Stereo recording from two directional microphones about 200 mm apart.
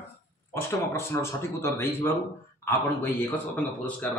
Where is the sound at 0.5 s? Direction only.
10° left (ahead or behind).